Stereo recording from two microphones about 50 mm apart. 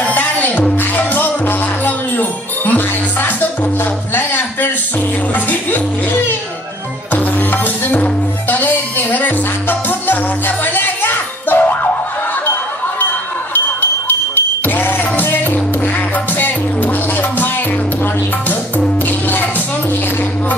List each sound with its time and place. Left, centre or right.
0.0 s music: left
4.1 s a sound: left
5.3 s music: left
13.5 s a sound: left
14.7 s music: left
19.0 s music: left